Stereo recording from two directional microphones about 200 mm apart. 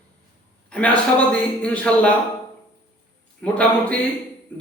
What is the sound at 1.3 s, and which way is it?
Speech, 5° left (ahead or behind).